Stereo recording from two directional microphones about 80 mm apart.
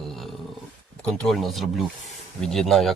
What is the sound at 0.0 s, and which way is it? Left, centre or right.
Dog, centre.